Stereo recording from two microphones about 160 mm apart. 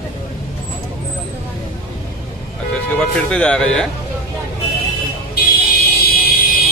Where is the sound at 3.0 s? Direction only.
5° left (ahead or behind).